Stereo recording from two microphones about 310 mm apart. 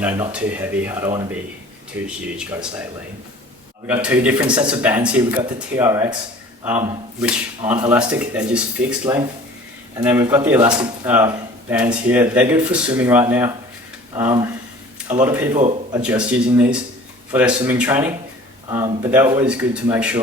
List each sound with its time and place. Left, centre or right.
0.0 s speech: centre
4.0 s a man's voice: centre
7.7 s a man's voice: centre
15.5 s speech: right
16.0 s a man's voice: centre